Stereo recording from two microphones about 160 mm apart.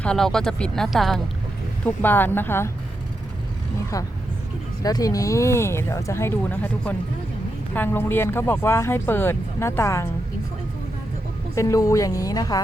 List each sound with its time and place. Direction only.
0.0 s speech: 5° left (ahead or behind)
1.8 s speech: 10° left (ahead or behind)
4.8 s speech: 25° left (ahead or behind)
11.5 s speech: 20° left (ahead or behind)